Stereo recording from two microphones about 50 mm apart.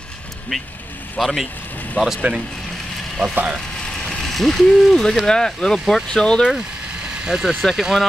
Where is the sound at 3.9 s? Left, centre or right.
Centre.